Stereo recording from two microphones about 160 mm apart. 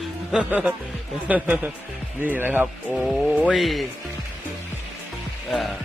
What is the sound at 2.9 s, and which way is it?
Speech, centre (ahead or behind).